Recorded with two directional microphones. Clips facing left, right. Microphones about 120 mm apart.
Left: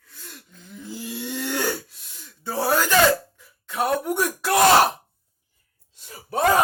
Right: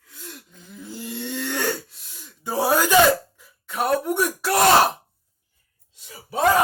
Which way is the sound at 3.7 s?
Centre (ahead or behind).